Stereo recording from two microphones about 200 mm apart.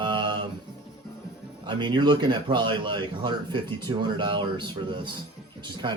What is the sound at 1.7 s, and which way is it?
A man's voice, 25° right (ahead or behind).